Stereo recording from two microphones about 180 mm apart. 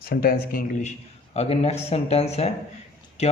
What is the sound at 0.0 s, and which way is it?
A man's voice, 55° left (ahead or behind).